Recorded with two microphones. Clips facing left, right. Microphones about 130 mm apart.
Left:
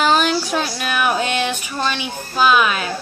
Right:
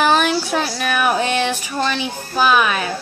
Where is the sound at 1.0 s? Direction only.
35° right (ahead or behind).